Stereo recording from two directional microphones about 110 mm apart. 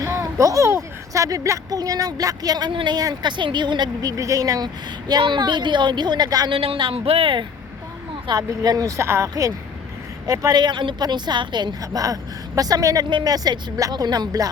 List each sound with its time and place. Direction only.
0.0 s a child's voice: 30° right (ahead or behind)
4.2 s a woman's voice: 30° right (ahead or behind)
6.5 s speech: 55° right (ahead or behind)
8.1 s a woman's voice: 35° right (ahead or behind)